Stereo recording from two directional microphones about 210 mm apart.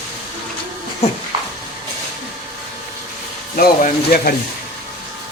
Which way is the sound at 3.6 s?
45° left (ahead or behind).